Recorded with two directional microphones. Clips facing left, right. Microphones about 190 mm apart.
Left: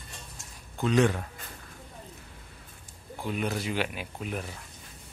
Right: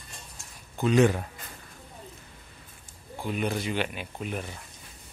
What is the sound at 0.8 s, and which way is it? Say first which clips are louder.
Speech: right 2 dB; 5° right (ahead or behind).